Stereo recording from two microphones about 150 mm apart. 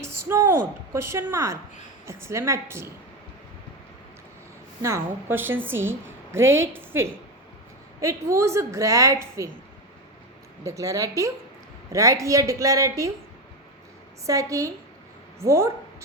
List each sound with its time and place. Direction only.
0.0 s a sound: 20° right (ahead or behind)
1.1 s a woman's voice: 20° right (ahead or behind)
4.8 s a woman's voice: 20° right (ahead or behind)
10.6 s a woman's voice: 20° right (ahead or behind)
14.3 s a woman's voice: 20° right (ahead or behind)